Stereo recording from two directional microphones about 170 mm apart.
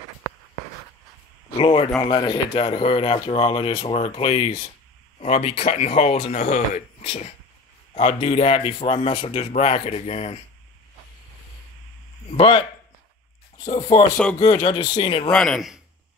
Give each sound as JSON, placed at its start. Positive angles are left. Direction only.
{"t": 1.6, "sound": "speech", "side_deg": 30}
{"t": 12.3, "sound": "speech", "side_deg": 35}
{"t": 15.3, "sound": "speech", "side_deg": 0}